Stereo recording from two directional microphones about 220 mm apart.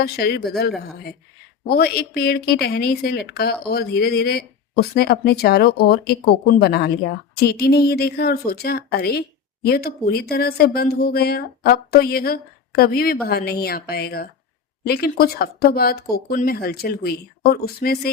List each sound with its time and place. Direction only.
0.0 s speech: 45° left (ahead or behind)
1.6 s speech: 45° left (ahead or behind)